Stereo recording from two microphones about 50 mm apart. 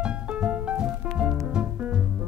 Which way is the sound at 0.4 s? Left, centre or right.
Right.